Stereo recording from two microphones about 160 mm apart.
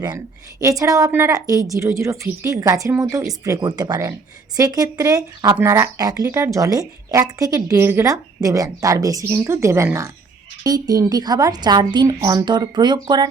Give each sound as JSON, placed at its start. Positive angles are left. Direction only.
{"t": 0.6, "sound": "speech", "side_deg": -20}